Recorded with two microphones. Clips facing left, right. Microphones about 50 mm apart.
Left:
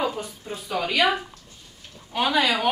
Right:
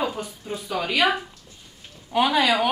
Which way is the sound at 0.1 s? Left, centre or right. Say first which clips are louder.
Right 1 dB; centre.